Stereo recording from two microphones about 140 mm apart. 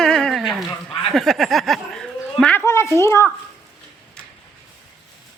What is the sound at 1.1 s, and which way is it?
Speech, centre (ahead or behind).